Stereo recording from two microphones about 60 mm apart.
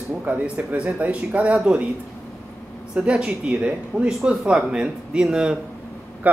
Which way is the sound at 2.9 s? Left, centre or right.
Centre.